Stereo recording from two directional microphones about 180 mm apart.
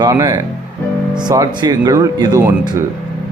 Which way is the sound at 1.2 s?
20° right (ahead or behind).